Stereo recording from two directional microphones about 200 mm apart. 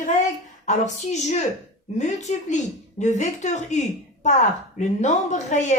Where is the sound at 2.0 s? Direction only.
35° left (ahead or behind).